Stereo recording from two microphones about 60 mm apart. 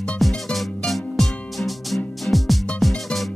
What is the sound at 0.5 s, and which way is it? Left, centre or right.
Music, centre.